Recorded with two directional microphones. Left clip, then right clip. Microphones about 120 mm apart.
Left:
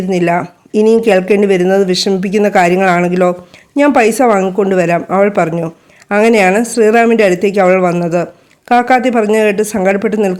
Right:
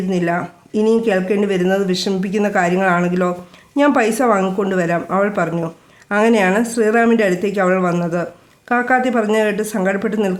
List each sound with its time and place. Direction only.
0.1 s speech: 50° left (ahead or behind)